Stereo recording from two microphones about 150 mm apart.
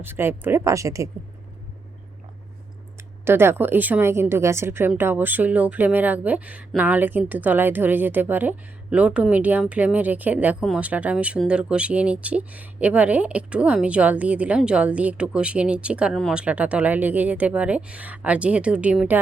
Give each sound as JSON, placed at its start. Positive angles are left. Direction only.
{"t": 0.0, "sound": "a woman's voice", "side_deg": -15}
{"t": 3.2, "sound": "a woman's voice", "side_deg": -15}